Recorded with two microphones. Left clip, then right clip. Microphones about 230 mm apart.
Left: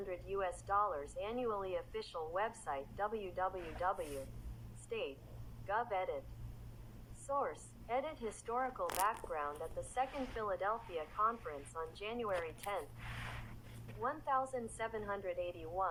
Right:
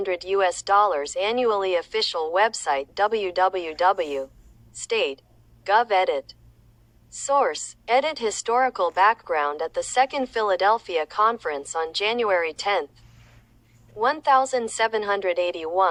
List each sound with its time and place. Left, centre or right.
0.0 s a woman's voice: right
7.3 s a woman's voice: right
14.0 s a woman's voice: right